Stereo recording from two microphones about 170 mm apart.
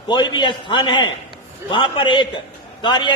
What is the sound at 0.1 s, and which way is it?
A man's voice, 25° left (ahead or behind).